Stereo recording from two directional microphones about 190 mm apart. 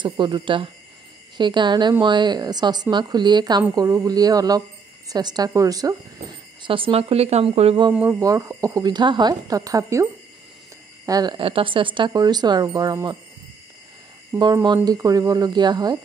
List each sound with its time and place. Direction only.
0.0 s a woman's voice: 25° right (ahead or behind)
7.9 s speech: 10° right (ahead or behind)
11.1 s a woman's voice: 20° right (ahead or behind)
14.4 s a woman's voice: 20° right (ahead or behind)